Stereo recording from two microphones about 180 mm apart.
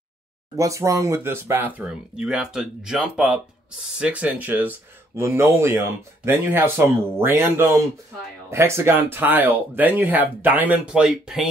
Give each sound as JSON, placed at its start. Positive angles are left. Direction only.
{"t": 0.6, "sound": "speech", "side_deg": -15}